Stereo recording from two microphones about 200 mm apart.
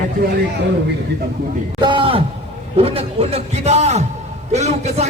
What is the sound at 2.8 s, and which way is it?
A man's voice, 30° right (ahead or behind).